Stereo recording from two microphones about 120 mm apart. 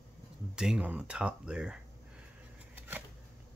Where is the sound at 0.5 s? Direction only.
5° right (ahead or behind).